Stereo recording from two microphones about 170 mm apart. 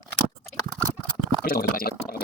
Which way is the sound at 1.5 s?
60° left (ahead or behind).